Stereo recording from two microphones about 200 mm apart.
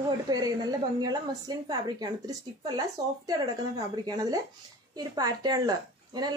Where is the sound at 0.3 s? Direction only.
20° right (ahead or behind).